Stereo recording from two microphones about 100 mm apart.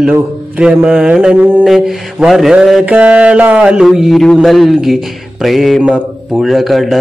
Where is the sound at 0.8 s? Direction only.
10° right (ahead or behind).